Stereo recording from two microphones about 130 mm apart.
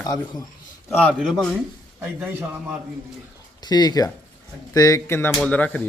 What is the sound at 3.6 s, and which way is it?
Speech, 30° left (ahead or behind).